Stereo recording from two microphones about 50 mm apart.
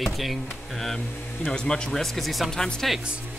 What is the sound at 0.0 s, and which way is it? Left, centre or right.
Speech, centre.